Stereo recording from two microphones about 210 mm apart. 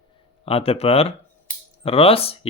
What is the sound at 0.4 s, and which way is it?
Speech, 25° left (ahead or behind).